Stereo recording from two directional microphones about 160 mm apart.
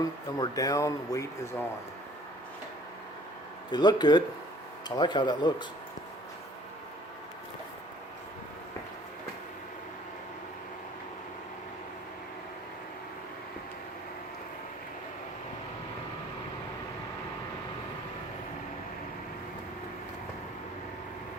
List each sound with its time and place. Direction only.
0.0 s speech: 25° left (ahead or behind)
3.7 s speech: 25° left (ahead or behind)